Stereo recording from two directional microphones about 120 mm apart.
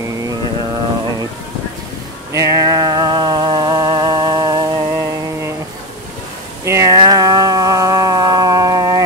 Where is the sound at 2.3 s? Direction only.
25° right (ahead or behind).